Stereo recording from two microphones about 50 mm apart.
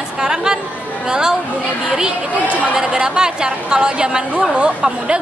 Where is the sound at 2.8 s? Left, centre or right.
Centre.